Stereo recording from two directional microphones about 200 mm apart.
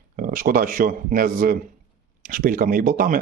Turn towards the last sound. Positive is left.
turn(degrees=-45)  # may be behind; listen again after turning